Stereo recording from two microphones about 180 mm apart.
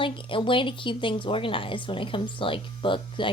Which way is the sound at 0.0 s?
30° left (ahead or behind).